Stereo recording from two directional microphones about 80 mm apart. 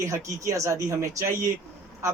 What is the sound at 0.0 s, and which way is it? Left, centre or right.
A man's voice, right.